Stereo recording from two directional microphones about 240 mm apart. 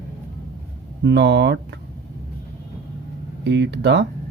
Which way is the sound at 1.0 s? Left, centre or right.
Right.